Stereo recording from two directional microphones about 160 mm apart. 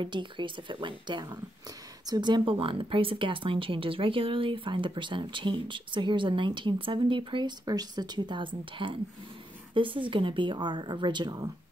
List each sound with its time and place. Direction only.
0.0 s speech: 30° right (ahead or behind)